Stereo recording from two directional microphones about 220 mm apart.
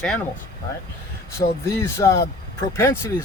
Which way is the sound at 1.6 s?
10° left (ahead or behind).